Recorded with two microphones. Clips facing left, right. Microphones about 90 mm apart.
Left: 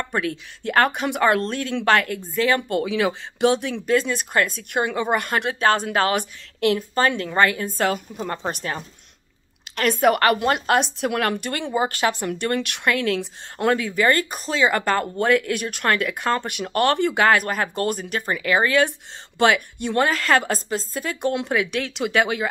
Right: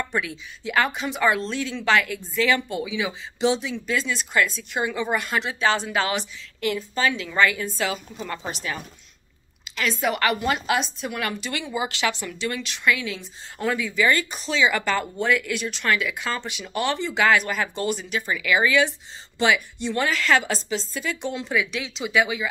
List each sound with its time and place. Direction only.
0.0 s a sound: 45° left (ahead or behind)
0.7 s speech: 55° left (ahead or behind)
9.7 s speech: 55° left (ahead or behind)
10.8 s speech: 70° left (ahead or behind)
13.9 s speech: 50° left (ahead or behind)